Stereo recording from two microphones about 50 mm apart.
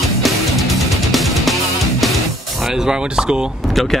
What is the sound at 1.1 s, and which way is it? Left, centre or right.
Music, centre.